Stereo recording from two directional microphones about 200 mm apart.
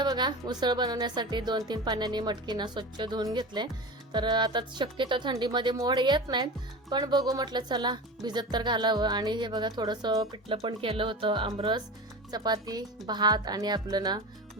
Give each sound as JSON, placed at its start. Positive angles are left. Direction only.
{"t": 0.0, "sound": "speech", "side_deg": -20}